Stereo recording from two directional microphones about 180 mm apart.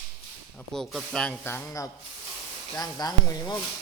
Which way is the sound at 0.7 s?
Centre (ahead or behind).